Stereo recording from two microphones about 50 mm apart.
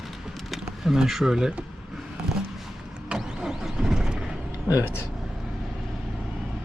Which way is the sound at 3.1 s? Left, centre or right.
Centre.